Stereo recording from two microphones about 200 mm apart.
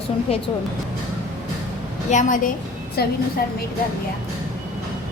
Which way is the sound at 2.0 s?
40° left (ahead or behind).